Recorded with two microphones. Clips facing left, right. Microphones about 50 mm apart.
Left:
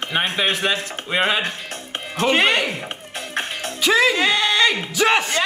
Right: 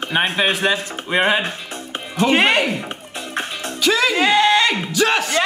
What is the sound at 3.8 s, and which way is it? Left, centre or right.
Music, centre.